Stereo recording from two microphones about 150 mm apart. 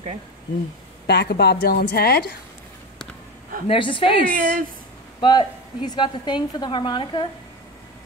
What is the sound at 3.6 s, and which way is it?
A woman's voice, 35° left (ahead or behind).